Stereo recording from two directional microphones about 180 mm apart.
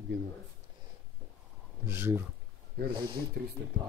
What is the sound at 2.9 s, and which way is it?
Speech, 25° right (ahead or behind).